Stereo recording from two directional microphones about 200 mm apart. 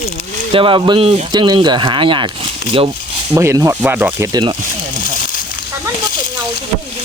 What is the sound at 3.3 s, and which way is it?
Speech, 15° right (ahead or behind).